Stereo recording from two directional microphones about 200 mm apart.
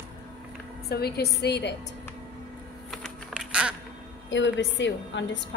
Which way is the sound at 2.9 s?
Centre (ahead or behind).